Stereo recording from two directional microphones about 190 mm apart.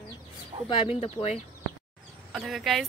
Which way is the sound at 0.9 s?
30° left (ahead or behind).